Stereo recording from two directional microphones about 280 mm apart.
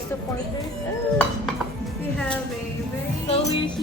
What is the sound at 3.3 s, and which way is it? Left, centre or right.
Music, centre.